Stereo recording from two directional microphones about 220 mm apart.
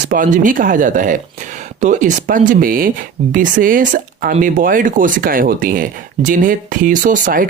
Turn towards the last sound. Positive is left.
turn(degrees=-40)  # may be behind; listen again after turning